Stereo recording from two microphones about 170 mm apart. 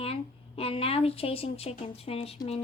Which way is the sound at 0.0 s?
35° left (ahead or behind).